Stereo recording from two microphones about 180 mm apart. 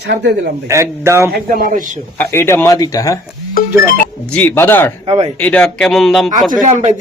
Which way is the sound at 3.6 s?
50° left (ahead or behind).